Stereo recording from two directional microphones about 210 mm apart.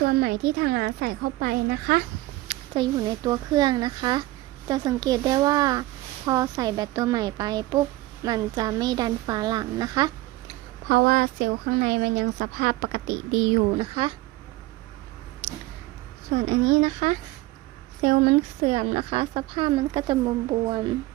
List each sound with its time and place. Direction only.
0.2 s a woman's voice: 50° right (ahead or behind)
2.7 s speech: 20° right (ahead or behind)
10.8 s a woman's voice: 45° right (ahead or behind)
13.7 s speech: 25° right (ahead or behind)
16.5 s speech: 35° right (ahead or behind)